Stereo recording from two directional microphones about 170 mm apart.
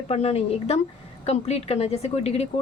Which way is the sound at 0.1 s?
35° left (ahead or behind).